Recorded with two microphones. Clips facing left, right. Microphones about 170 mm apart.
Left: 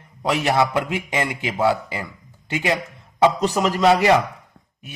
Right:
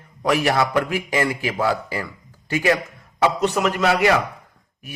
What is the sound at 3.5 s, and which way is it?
Speech, 30° left (ahead or behind).